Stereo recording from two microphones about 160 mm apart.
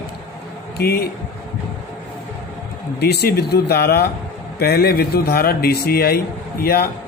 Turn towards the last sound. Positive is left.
turn(degrees=70)  # may be behind; listen again after turning